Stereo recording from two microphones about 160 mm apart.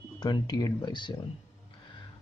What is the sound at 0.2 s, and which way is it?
Speech, 25° left (ahead or behind).